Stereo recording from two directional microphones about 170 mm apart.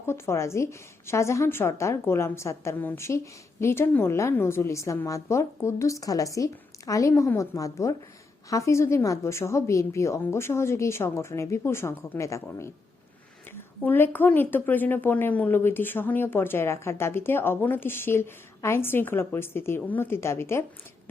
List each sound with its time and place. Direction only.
0.0 s speech: 15° left (ahead or behind)
13.8 s speech: 10° left (ahead or behind)